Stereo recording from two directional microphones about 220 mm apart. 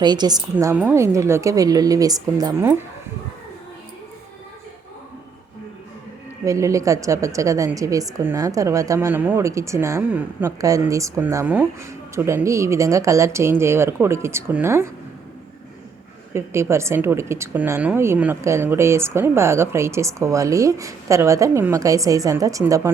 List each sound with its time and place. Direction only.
0.0 s a woman's voice: 20° right (ahead or behind)
6.4 s a woman's voice: 15° right (ahead or behind)
16.3 s a woman's voice: 10° right (ahead or behind)